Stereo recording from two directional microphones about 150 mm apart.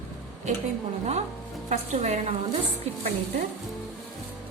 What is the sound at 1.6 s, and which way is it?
Speech, 50° right (ahead or behind).